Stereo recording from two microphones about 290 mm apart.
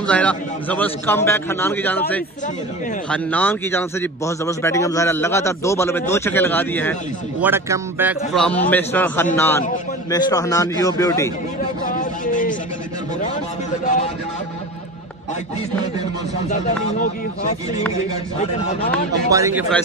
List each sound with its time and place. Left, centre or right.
0.0 s a man's voice: centre
7.3 s a man's voice: centre
11.9 s a sound: left
16.4 s speech: left
18.4 s speech: left
19.3 s a man's voice: centre